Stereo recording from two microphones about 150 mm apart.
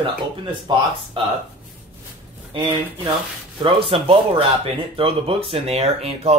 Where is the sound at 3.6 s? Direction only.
35° right (ahead or behind).